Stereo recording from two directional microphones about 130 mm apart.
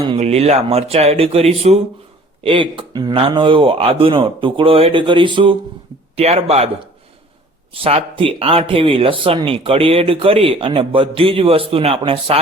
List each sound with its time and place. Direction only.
0.2 s speech: 55° right (ahead or behind)
2.4 s speech: 40° right (ahead or behind)
6.1 s speech: 55° right (ahead or behind)
7.7 s speech: 45° right (ahead or behind)